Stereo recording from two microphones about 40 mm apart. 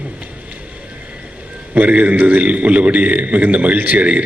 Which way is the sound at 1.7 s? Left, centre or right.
Right.